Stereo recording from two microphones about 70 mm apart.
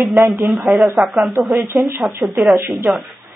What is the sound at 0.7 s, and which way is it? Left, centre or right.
Speech, centre.